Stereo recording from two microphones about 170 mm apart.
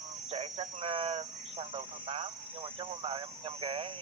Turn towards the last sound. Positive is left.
turn(degrees=-30)  # may be behind; listen again after turning